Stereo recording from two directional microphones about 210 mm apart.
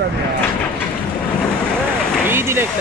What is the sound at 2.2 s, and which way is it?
Speech, 10° right (ahead or behind).